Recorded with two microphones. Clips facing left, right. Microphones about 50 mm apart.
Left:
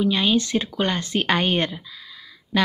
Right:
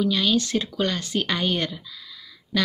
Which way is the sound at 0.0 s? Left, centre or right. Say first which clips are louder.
Left 2 dB; left.